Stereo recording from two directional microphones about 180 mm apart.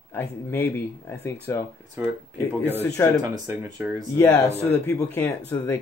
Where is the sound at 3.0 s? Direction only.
15° left (ahead or behind).